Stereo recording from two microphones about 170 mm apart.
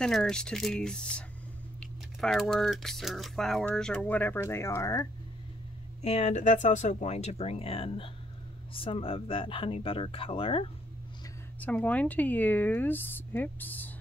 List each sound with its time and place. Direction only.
0.0 s speech: 5° left (ahead or behind)
6.0 s speech: 40° left (ahead or behind)
11.6 s speech: 10° left (ahead or behind)